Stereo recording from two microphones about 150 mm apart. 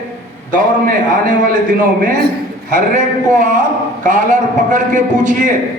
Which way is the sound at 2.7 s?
60° right (ahead or behind).